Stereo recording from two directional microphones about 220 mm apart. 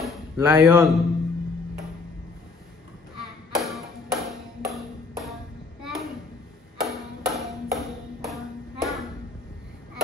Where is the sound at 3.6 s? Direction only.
Centre (ahead or behind).